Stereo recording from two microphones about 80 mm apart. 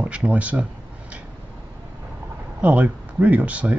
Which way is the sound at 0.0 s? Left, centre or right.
Centre.